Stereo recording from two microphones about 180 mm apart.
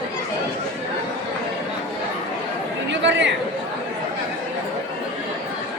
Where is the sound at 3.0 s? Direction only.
80° right.